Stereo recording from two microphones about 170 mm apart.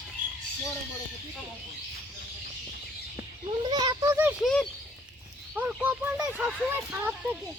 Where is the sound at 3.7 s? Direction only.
25° right (ahead or behind).